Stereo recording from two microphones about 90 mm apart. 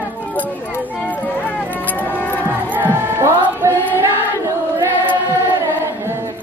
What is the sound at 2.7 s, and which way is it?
Music, 25° right (ahead or behind).